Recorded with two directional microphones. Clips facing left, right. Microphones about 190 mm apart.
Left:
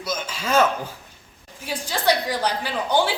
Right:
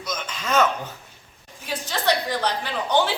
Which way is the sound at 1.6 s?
10° left (ahead or behind).